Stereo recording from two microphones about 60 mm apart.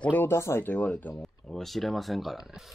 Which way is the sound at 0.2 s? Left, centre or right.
Left.